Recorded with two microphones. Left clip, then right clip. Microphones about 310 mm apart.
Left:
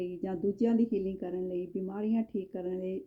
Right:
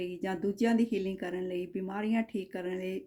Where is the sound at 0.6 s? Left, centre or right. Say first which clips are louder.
Right 1 dB; centre.